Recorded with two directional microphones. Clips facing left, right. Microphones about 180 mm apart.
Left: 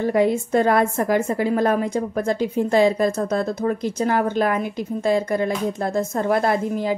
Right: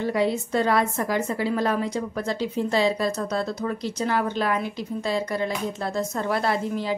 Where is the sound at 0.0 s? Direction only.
50° left (ahead or behind).